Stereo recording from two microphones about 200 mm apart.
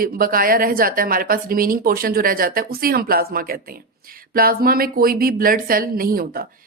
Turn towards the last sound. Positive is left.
turn(degrees=-45)  # may be behind; listen again after turning